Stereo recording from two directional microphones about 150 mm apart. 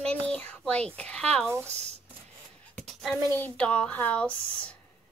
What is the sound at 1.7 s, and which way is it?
Speech, 45° right (ahead or behind).